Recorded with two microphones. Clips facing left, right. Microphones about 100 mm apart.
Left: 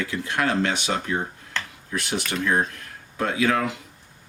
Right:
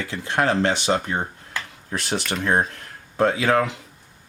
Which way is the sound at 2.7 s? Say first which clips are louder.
Right 1 dB; 35° right (ahead or behind).